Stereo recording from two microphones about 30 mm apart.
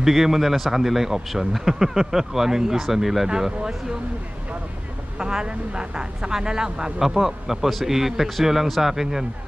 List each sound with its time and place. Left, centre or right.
0.0 s a man's voice: centre
3.3 s speech: centre
5.2 s a man's voice: right